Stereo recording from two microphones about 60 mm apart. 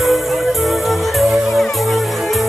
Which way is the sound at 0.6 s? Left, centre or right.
Centre.